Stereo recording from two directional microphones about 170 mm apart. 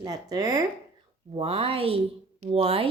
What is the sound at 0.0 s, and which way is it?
Speech, 20° right (ahead or behind).